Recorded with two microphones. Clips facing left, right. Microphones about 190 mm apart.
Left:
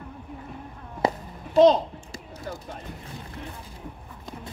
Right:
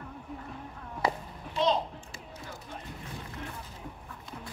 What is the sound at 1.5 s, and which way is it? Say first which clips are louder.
Speech: left 11 dB; 40° left (ahead or behind).